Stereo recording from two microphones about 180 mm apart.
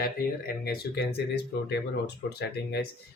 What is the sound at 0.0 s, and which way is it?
Speech, 60° left (ahead or behind).